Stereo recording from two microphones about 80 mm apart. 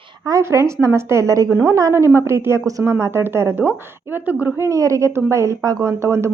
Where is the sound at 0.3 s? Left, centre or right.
Right.